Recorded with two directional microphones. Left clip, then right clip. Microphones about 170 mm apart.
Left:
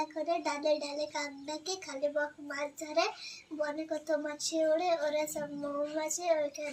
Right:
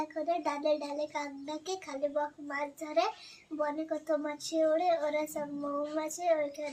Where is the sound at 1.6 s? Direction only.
35° right (ahead or behind).